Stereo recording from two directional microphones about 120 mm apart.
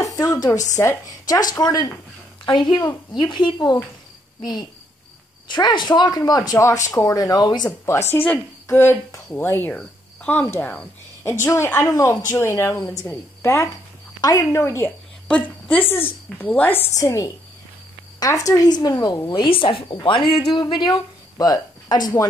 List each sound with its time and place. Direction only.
0.0 s a sound: 30° left (ahead or behind)
0.6 s speech: 30° left (ahead or behind)
8.6 s speech: 20° left (ahead or behind)
9.8 s cricket: 10° left (ahead or behind)
10.4 s a woman's voice: 15° left (ahead or behind)
16.9 s speech: 25° left (ahead or behind)